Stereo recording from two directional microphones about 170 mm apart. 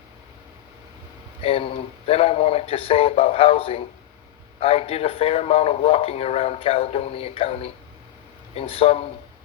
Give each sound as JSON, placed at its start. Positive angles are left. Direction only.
{"t": 1.4, "sound": "a man's voice", "side_deg": 35}